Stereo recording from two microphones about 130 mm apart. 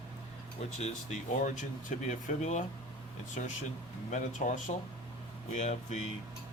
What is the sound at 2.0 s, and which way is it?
Speech, 70° left (ahead or behind).